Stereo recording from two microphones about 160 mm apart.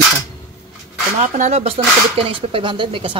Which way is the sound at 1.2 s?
45° right (ahead or behind).